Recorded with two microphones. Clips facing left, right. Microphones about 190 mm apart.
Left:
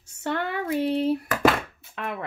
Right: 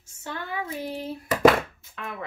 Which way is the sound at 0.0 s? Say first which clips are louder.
Left 8 dB; 70° left (ahead or behind).